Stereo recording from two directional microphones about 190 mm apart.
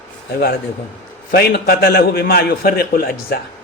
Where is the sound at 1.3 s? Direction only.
55° left (ahead or behind).